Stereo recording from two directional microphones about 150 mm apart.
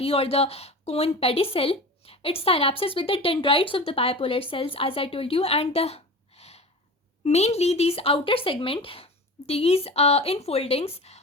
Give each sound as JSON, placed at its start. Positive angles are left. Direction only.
{"t": 0.0, "sound": "a woman's voice", "side_deg": 40}